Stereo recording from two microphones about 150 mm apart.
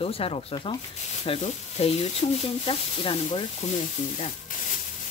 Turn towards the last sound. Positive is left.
turn(degrees=45)  # may be behind; listen again after turning